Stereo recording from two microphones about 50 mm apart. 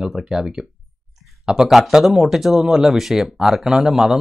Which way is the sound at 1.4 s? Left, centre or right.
Centre.